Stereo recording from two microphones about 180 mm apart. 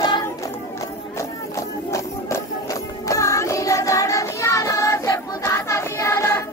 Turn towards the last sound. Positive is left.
turn(degrees=15)  # may be behind; listen again after turning